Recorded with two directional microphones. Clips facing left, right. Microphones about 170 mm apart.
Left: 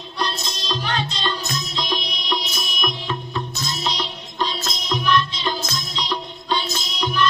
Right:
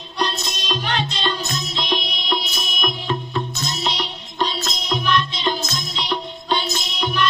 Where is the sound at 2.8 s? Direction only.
25° right (ahead or behind).